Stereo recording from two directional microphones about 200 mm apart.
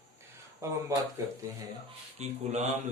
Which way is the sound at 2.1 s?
35° right (ahead or behind).